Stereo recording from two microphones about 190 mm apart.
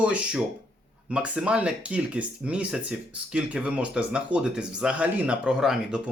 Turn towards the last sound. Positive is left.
turn(degrees=-5)  # may be behind; listen again after turning